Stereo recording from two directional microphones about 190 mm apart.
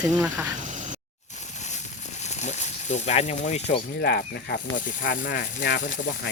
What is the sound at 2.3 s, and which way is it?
Speech, 35° left (ahead or behind).